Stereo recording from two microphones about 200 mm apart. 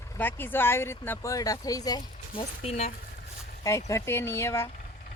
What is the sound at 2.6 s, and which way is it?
Speech, 35° left (ahead or behind).